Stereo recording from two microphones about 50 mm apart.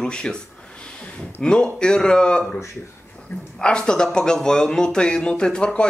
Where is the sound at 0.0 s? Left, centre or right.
Centre.